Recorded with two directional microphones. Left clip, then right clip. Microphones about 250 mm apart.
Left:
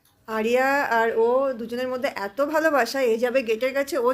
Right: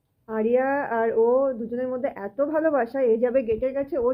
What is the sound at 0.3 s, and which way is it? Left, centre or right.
Speech, centre.